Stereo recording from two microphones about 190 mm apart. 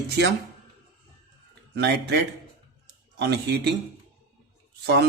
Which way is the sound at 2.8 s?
60° right (ahead or behind).